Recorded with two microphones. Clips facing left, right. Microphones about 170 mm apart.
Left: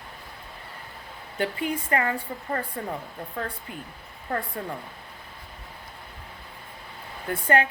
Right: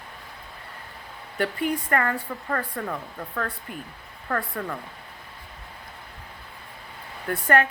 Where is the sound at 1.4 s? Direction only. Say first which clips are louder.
Right 2 dB; 45° right (ahead or behind).